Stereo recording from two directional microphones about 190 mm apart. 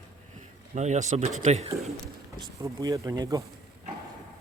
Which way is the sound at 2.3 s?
20° right (ahead or behind).